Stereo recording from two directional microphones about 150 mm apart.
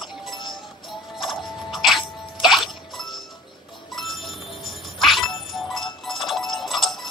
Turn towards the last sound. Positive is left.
turn(degrees=0)  # may be behind; listen again after turning